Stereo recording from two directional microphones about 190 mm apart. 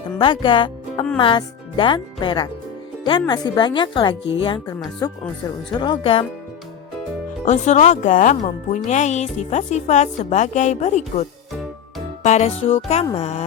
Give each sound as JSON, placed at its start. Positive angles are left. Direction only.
{"t": 0.2, "sound": "speech", "side_deg": 25}
{"t": 7.4, "sound": "speech", "side_deg": 40}